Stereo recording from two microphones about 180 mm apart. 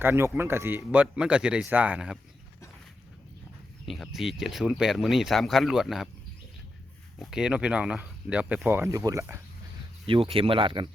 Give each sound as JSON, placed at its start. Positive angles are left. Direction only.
{"t": 0.0, "sound": "speech", "side_deg": -15}
{"t": 3.8, "sound": "speech", "side_deg": 0}
{"t": 7.2, "sound": "speech", "side_deg": -5}
{"t": 10.1, "sound": "speech", "side_deg": -30}